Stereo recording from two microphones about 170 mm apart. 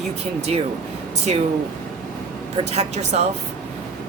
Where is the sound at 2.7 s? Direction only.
40° right (ahead or behind).